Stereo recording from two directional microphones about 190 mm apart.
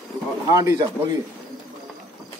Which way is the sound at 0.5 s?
20° right (ahead or behind).